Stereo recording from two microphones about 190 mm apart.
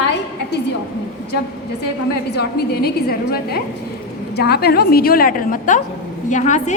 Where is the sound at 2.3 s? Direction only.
55° left (ahead or behind).